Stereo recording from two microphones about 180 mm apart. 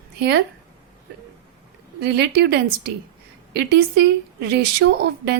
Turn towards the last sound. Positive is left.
turn(degrees=-65)  # may be behind; listen again after turning